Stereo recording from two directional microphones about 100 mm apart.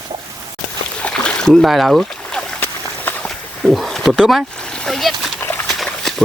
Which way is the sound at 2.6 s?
15° left (ahead or behind).